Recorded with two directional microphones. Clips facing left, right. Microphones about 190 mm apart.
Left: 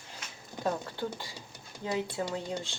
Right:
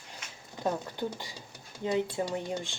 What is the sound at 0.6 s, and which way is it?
Speech, 15° right (ahead or behind).